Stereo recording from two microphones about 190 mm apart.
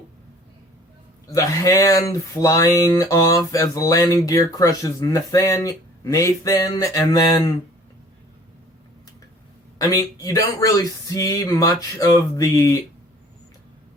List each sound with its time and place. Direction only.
1.3 s speech: 15° left (ahead or behind)
9.7 s speech: 20° left (ahead or behind)